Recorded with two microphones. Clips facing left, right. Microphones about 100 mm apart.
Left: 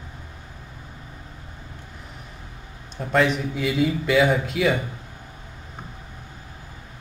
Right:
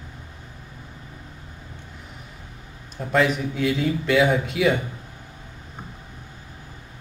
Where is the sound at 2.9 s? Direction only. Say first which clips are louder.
Even; centre (ahead or behind).